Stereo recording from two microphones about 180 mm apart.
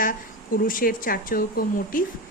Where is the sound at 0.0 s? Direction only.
50° left (ahead or behind).